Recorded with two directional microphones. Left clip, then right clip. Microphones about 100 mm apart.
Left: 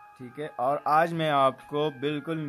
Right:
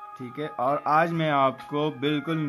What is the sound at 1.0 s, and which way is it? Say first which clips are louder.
Speech: right 1 dB; 90° left.